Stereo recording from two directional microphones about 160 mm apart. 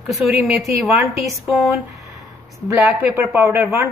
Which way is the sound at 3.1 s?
15° right (ahead or behind).